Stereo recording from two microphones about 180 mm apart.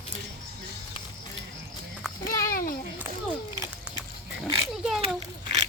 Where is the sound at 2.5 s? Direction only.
55° left (ahead or behind).